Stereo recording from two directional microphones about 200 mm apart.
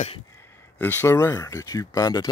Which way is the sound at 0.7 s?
10° left (ahead or behind).